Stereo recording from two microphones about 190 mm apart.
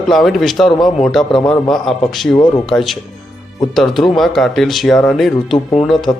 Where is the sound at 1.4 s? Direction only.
20° left (ahead or behind).